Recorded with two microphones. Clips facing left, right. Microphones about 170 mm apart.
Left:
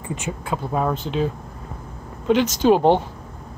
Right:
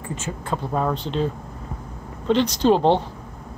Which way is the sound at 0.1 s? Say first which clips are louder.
Left 1 dB; 15° left (ahead or behind).